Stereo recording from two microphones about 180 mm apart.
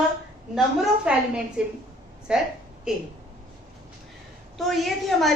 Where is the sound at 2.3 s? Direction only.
5° right (ahead or behind).